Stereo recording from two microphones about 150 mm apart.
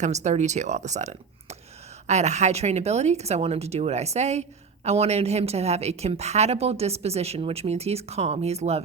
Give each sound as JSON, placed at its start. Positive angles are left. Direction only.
{"t": 0.0, "sound": "speech", "side_deg": -50}